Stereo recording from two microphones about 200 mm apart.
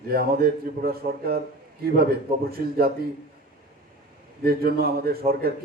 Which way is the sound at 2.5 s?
50° right (ahead or behind).